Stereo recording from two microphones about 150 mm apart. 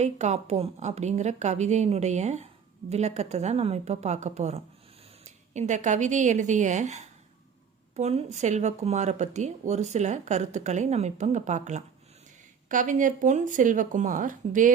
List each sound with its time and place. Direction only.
0.0 s speech: 50° right (ahead or behind)